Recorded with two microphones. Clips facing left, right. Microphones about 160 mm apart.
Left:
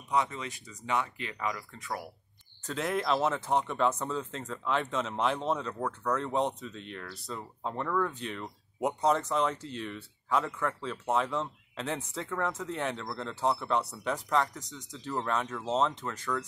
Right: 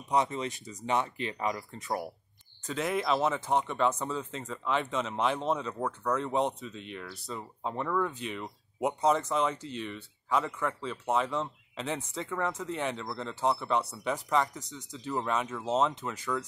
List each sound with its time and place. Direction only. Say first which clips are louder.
0.1 s speech: right 2 dB; 25° right (ahead or behind)
2.6 s speech: right 1 dB; centre (ahead or behind)